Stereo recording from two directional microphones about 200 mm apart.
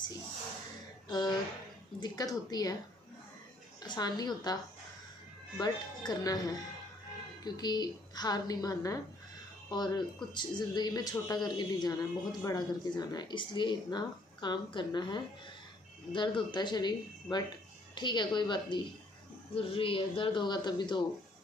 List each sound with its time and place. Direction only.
1.0 s speech: 20° left (ahead or behind)
3.8 s speech: 20° left (ahead or behind)
5.6 s speech: 20° left (ahead or behind)